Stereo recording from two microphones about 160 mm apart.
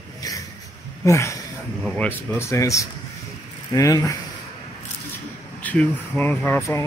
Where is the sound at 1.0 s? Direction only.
20° left (ahead or behind).